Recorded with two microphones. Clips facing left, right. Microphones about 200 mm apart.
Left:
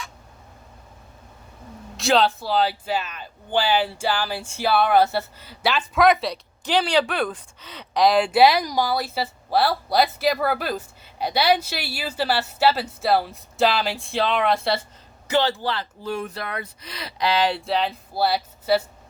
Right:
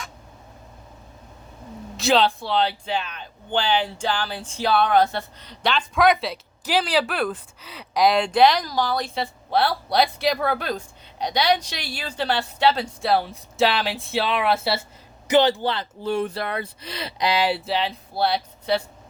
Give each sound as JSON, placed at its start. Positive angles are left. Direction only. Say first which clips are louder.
{"t": 2.0, "sound": "speech", "louder": "even", "side_deg": 0}
{"t": 15.3, "sound": "speech", "louder": "right 4 dB", "side_deg": -20}